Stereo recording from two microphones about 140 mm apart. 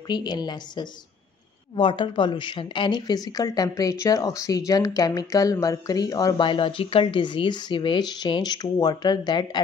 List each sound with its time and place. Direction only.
0.1 s speech: 30° left (ahead or behind)
6.4 s speech: 35° left (ahead or behind)